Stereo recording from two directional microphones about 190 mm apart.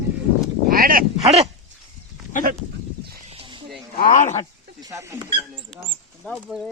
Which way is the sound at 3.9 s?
45° left (ahead or behind).